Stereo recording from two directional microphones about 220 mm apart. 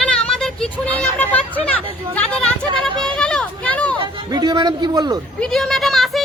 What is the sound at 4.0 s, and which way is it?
Speech, 20° right (ahead or behind).